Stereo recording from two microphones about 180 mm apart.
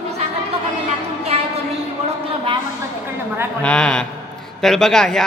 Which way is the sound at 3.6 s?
5° left (ahead or behind).